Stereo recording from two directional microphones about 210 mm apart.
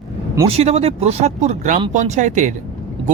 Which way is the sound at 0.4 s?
30° right (ahead or behind).